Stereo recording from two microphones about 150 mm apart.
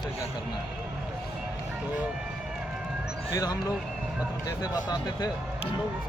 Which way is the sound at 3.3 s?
25° left (ahead or behind).